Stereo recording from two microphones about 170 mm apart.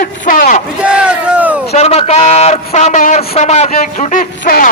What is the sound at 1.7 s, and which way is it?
A man's voice, 40° left (ahead or behind).